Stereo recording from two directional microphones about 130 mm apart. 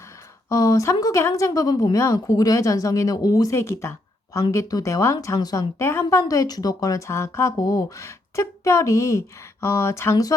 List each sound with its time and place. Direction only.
0.4 s a woman's voice: 25° left (ahead or behind)